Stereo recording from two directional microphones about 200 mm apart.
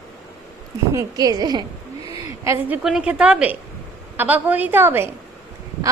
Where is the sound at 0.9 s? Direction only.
20° right (ahead or behind).